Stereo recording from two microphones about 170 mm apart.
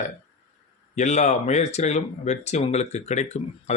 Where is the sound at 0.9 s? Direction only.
45° left (ahead or behind).